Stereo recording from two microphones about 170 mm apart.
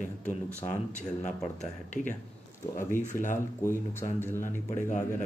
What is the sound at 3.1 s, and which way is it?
Speech, 15° left (ahead or behind).